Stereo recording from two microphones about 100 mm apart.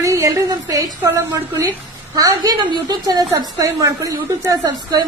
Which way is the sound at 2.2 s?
40° right (ahead or behind).